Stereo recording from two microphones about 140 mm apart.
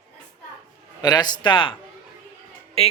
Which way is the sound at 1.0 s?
30° left (ahead or behind).